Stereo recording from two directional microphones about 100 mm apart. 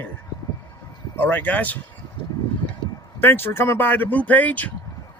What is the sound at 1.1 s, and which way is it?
Speech, 20° left (ahead or behind).